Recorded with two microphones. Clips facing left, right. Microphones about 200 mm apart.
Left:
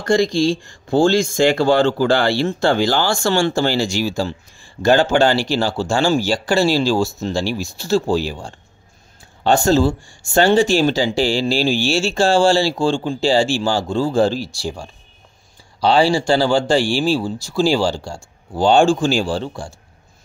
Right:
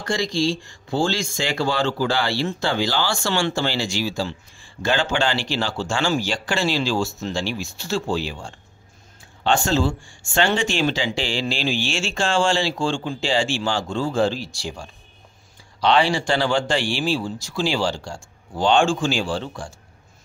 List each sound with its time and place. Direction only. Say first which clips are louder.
0.0 s speech: left 7 dB; 50° left (ahead or behind); by 19.7 s 35° left (ahead or behind)